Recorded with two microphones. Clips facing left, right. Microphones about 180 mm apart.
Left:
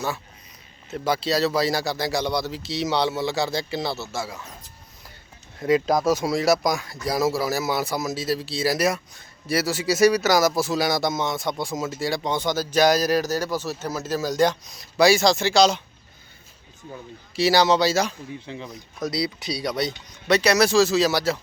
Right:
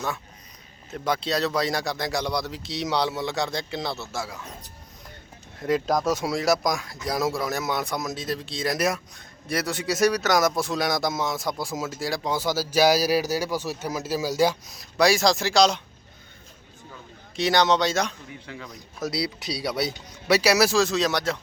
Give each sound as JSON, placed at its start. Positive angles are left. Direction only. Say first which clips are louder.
{"t": 0.9, "sound": "speech", "louder": "left 3 dB", "side_deg": 5}
{"t": 5.5, "sound": "speech", "louder": "left 3 dB", "side_deg": 0}
{"t": 17.3, "sound": "speech", "louder": "left 2 dB", "side_deg": 5}
{"t": 18.4, "sound": "speech", "louder": "left 1 dB", "side_deg": 25}
{"t": 18.7, "sound": "speech", "louder": "left 1 dB", "side_deg": -5}